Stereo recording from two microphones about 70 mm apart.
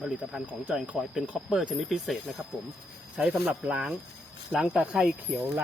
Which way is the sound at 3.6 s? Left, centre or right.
Centre.